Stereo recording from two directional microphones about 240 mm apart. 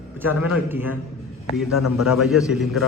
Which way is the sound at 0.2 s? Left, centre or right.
Centre.